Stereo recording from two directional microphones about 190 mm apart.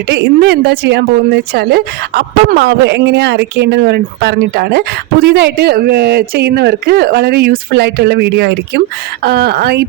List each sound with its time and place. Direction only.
0.1 s speech: 65° right (ahead or behind)